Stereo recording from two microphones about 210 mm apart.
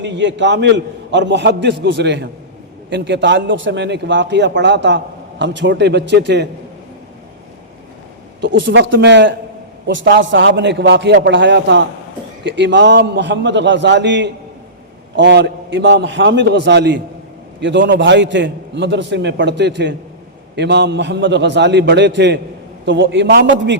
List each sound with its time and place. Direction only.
0.0 s a man's voice: 55° right (ahead or behind)
8.4 s a man's voice: 60° right (ahead or behind)